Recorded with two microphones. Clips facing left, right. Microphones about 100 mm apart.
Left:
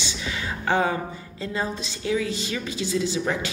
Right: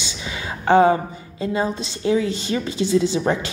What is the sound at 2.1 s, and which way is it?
A woman's voice, 30° right (ahead or behind).